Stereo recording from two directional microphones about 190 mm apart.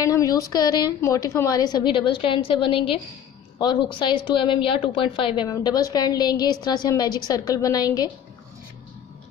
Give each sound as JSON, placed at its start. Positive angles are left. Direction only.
{"t": 0.0, "sound": "a woman's voice", "side_deg": 15}